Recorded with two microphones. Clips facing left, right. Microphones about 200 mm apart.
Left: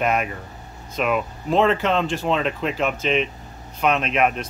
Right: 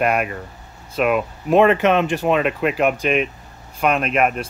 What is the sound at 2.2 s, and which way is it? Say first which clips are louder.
Speech: right 4 dB; 60° right (ahead or behind).